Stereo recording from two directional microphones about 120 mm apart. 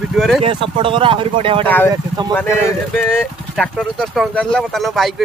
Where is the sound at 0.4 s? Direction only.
45° right (ahead or behind).